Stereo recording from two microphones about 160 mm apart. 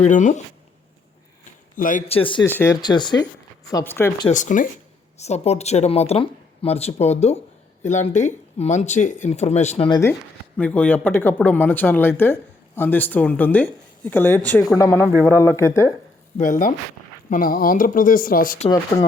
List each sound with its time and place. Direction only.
0.1 s speech: 50° left (ahead or behind)
1.7 s a man's voice: 55° left (ahead or behind)
2.0 s speech: 35° left (ahead or behind)
2.4 s speech: 15° left (ahead or behind)
2.8 s speech: 30° left (ahead or behind)
3.8 s speech: 15° left (ahead or behind)
4.3 s speech: 50° left (ahead or behind)
5.1 s speech: 45° left (ahead or behind)
10.6 s speech: 10° left (ahead or behind)
16.4 s speech: 55° left (ahead or behind)